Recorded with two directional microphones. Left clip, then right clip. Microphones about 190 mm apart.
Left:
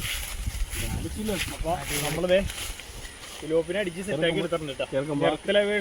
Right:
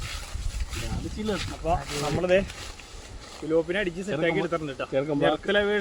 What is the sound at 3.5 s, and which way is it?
Speech, 10° right (ahead or behind).